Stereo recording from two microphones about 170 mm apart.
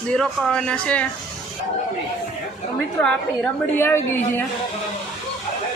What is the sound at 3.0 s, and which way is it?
Speech, 5° left (ahead or behind).